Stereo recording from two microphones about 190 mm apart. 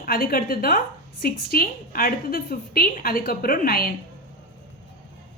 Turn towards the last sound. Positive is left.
turn(degrees=50)  # may be behind; listen again after turning